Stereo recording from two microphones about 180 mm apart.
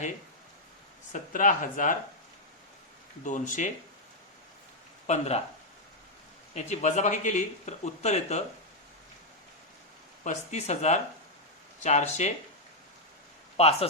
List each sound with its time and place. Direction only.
1.1 s speech: 45° left (ahead or behind)
3.2 s speech: 45° left (ahead or behind)
5.0 s speech: 40° left (ahead or behind)
6.5 s speech: 40° left (ahead or behind)
10.2 s speech: 40° left (ahead or behind)
13.6 s speech: 35° left (ahead or behind)